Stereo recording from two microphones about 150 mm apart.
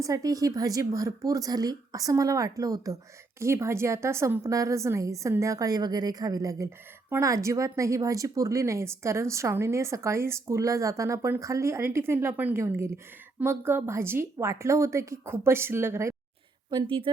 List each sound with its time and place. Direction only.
0.0 s a woman's voice: 25° right (ahead or behind)
16.6 s a woman's voice: 35° right (ahead or behind)